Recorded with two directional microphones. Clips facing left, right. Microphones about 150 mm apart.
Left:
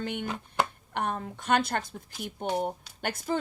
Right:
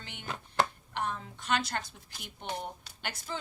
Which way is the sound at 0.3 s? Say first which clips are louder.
Right 4 dB; 10° left (ahead or behind).